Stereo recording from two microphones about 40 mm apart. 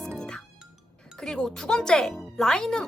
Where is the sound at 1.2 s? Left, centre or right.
Centre.